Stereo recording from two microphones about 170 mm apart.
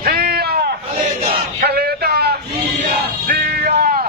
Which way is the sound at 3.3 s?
60° right (ahead or behind).